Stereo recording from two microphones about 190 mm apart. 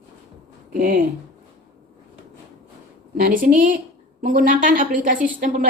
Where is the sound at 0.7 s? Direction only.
50° right (ahead or behind).